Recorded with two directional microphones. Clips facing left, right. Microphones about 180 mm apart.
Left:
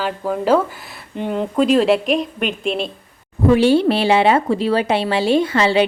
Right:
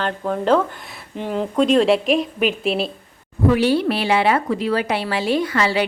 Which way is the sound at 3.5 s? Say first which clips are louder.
Left 6 dB; 25° left (ahead or behind).